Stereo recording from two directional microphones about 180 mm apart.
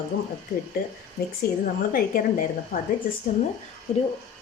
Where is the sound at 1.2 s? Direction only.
55° left (ahead or behind).